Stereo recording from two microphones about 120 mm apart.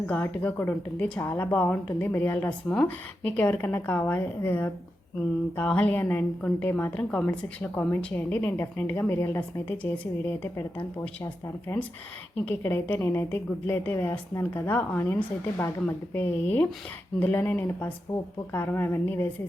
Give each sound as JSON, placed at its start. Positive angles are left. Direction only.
{"t": 0.1, "sound": "a woman's voice", "side_deg": 15}
{"t": 12.5, "sound": "a woman's voice", "side_deg": 20}